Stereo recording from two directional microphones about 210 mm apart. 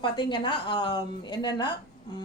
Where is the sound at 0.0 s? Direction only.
20° left (ahead or behind).